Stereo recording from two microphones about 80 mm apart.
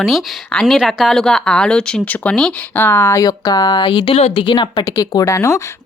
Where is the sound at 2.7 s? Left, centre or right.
Left.